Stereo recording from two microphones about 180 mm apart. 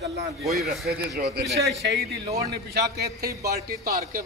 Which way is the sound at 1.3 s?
65° right (ahead or behind).